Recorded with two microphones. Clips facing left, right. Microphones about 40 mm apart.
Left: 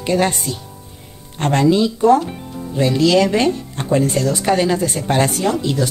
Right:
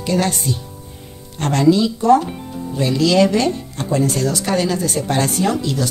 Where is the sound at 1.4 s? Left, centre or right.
Left.